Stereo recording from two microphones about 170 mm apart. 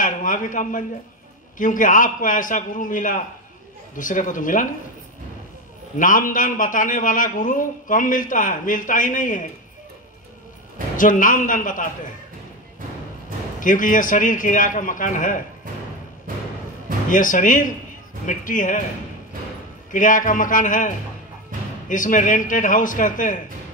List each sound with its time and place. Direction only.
0.0 s a man's voice: 50° left (ahead or behind)
5.9 s a man's voice: 50° left (ahead or behind)
11.0 s a man's voice: 50° left (ahead or behind)
13.6 s a man's voice: 50° left (ahead or behind)
17.1 s a man's voice: 50° left (ahead or behind)
19.9 s a man's voice: 50° left (ahead or behind)